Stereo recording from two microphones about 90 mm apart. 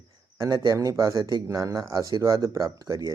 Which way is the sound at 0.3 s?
45° right (ahead or behind).